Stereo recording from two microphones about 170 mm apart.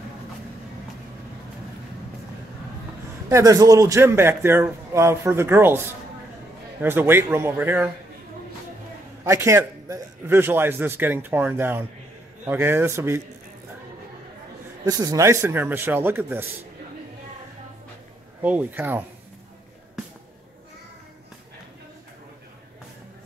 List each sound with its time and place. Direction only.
3.3 s a man's voice: 20° right (ahead or behind)
9.2 s a man's voice: 15° right (ahead or behind)
14.9 s a man's voice: 20° right (ahead or behind)
18.4 s a man's voice: 10° right (ahead or behind)